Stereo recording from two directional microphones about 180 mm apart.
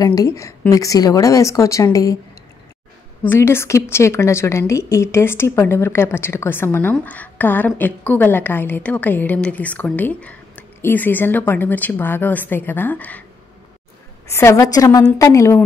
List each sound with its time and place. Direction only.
0.0 s a woman's voice: 20° left (ahead or behind)
3.3 s a woman's voice: 15° left (ahead or behind)
14.2 s a woman's voice: 15° left (ahead or behind)